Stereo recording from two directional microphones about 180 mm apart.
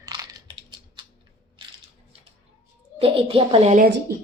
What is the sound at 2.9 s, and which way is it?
Speech, 30° right (ahead or behind).